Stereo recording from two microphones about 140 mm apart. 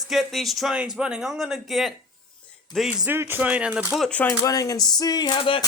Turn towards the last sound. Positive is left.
turn(degrees=35)  # may be behind; listen again after turning